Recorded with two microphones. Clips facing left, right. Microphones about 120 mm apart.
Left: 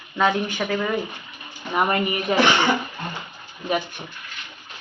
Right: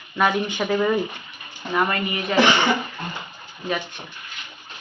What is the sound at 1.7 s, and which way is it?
Speech, 20° left (ahead or behind).